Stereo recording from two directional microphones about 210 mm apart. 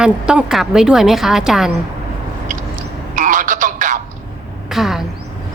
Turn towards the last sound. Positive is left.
turn(degrees=0)  # may be behind; listen again after turning